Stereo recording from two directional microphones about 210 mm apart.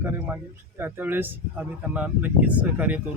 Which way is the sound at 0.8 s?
10° right (ahead or behind).